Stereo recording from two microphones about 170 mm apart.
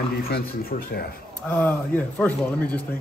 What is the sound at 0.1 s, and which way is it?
A man's voice, 65° left (ahead or behind).